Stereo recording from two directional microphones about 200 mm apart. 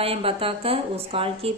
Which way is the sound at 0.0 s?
30° right (ahead or behind).